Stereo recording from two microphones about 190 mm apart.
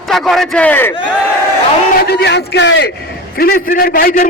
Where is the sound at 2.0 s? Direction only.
60° left (ahead or behind).